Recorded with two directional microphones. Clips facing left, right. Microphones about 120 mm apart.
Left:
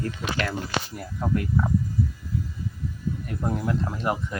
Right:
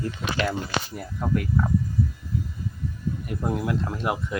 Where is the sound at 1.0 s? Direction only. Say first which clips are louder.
Even; centre (ahead or behind).